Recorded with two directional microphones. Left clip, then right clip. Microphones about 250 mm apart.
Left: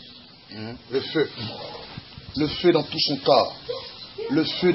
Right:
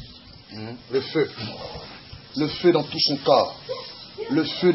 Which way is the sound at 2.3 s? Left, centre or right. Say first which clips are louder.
Even; centre.